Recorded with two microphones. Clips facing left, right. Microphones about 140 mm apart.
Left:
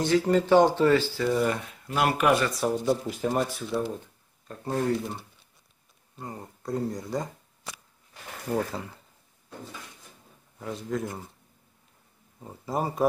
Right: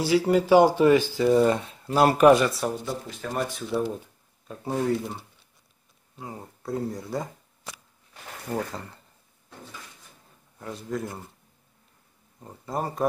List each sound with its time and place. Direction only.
0.0 s speech: 10° right (ahead or behind); by 2.3 s 35° right (ahead or behind)
2.6 s speech: centre (ahead or behind)
3.1 s speech: 15° left (ahead or behind)
3.3 s speech: centre (ahead or behind)
8.5 s speech: centre (ahead or behind)
10.6 s speech: centre (ahead or behind)
12.4 s speech: 5° left (ahead or behind)